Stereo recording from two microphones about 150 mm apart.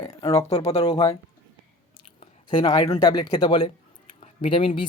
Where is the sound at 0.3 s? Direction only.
45° left (ahead or behind).